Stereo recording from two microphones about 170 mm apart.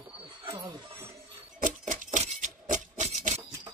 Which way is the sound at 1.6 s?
50° right (ahead or behind).